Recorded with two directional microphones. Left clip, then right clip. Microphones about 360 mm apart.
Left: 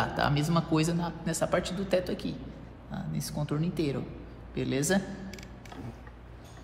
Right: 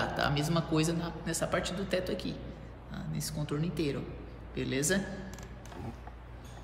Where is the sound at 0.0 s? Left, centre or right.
Centre.